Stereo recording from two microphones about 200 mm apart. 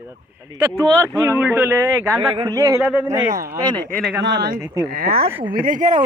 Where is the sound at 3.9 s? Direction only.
5° left (ahead or behind).